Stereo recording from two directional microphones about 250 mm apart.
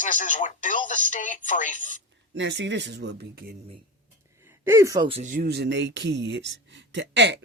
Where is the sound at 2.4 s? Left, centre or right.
Right.